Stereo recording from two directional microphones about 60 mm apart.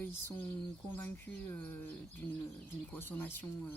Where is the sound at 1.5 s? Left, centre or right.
Left.